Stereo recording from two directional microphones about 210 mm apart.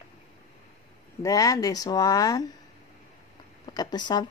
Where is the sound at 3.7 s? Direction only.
20° left (ahead or behind).